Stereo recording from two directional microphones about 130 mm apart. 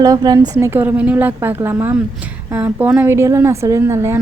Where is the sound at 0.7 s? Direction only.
15° right (ahead or behind).